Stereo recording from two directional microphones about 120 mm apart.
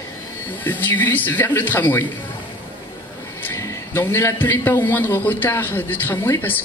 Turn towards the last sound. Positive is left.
turn(degrees=20)  # may be behind; listen again after turning